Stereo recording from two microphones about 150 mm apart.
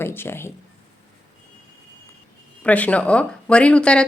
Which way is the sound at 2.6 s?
10° left (ahead or behind).